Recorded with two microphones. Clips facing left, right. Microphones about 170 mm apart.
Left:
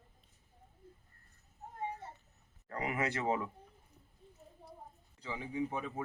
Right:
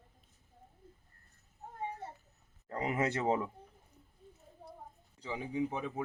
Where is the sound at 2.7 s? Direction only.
25° right (ahead or behind).